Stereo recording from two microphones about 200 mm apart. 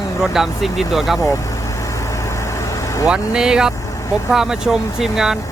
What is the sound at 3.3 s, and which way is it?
Speech, 5° right (ahead or behind).